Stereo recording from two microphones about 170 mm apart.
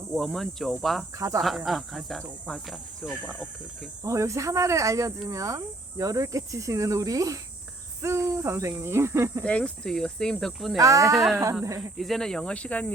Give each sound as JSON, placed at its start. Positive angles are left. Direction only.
{"t": 0.1, "sound": "speech", "side_deg": 0}
{"t": 1.1, "sound": "hoot", "side_deg": -20}
{"t": 1.4, "sound": "speech", "side_deg": 0}
{"t": 4.0, "sound": "hoot", "side_deg": -20}
{"t": 5.3, "sound": "cricket", "side_deg": -20}
{"t": 8.0, "sound": "hoot", "side_deg": -15}
{"t": 9.4, "sound": "speech", "side_deg": 5}
{"t": 10.8, "sound": "cricket", "side_deg": -20}
{"t": 11.8, "sound": "speech", "side_deg": 0}